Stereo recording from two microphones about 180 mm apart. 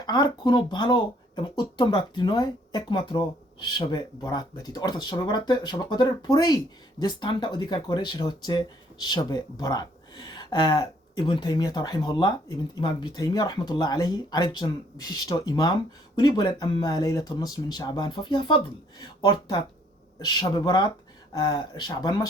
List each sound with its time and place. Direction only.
0.0 s speech: 25° left (ahead or behind)